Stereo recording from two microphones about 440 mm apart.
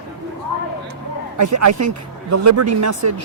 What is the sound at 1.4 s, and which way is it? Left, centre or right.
Speech, right.